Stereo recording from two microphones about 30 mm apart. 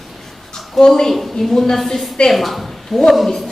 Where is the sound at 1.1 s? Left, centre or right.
Centre.